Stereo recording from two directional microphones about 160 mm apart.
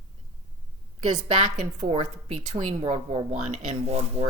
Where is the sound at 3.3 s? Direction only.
45° right (ahead or behind).